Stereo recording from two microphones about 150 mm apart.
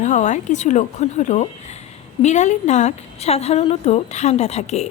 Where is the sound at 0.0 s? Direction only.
55° left (ahead or behind).